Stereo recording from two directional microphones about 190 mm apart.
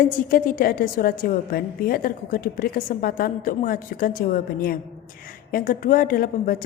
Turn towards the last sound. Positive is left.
turn(degrees=50)  # may be behind; listen again after turning